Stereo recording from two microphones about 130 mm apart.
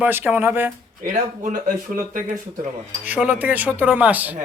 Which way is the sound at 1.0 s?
80° right.